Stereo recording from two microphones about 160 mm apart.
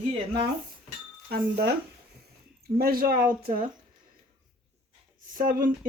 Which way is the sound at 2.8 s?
70° right (ahead or behind).